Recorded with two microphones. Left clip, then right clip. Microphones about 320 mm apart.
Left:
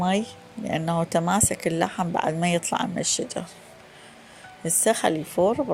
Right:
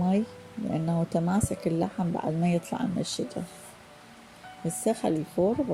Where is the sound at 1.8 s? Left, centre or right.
Left.